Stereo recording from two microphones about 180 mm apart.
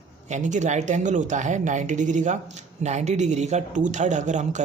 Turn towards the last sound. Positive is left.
turn(degrees=-40)  # may be behind; listen again after turning